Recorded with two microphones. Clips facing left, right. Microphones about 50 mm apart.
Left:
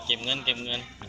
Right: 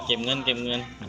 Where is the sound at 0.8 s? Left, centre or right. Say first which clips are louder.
Right 5 dB; centre.